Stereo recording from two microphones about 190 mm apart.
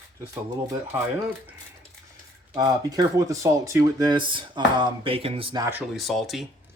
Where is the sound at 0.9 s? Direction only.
10° right (ahead or behind).